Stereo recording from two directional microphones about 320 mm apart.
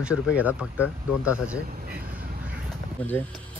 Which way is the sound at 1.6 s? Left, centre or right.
Right.